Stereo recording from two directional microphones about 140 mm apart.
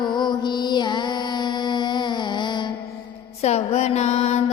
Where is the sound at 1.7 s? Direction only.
30° left (ahead or behind).